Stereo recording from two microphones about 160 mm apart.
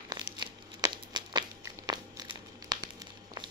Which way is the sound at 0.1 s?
25° right (ahead or behind).